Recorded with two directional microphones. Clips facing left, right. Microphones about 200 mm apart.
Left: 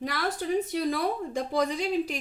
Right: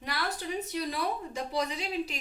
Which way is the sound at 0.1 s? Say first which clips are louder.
Left 3 dB; 50° left (ahead or behind).